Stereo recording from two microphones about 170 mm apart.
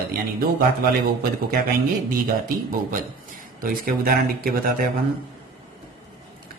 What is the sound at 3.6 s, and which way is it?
Speech, 55° right (ahead or behind).